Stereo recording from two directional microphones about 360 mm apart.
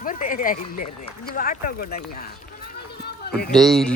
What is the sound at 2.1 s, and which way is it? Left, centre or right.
Run, left.